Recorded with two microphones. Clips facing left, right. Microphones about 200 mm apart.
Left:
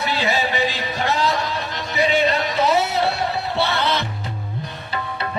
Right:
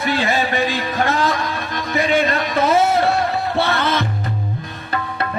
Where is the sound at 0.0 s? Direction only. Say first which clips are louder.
Right 3 dB; 50° right (ahead or behind).